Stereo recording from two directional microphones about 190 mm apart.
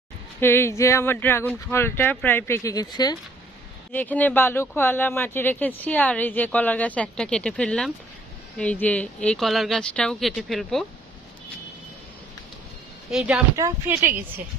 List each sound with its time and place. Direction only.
0.3 s speech: 10° left (ahead or behind)
3.9 s speech: 10° left (ahead or behind)
13.1 s speech: 5° right (ahead or behind)
13.6 s speech: 15° right (ahead or behind)